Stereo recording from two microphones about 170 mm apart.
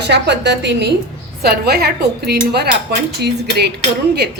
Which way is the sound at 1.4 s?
70° right (ahead or behind).